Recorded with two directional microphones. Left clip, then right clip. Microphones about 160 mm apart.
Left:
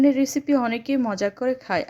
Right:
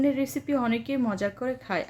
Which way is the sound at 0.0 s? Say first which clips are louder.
Left 6 dB; 40° left (ahead or behind).